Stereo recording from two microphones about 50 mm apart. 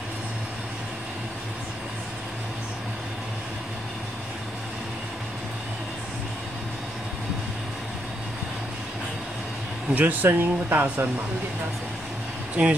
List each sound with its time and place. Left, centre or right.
9.9 s speech: right
12.6 s speech: right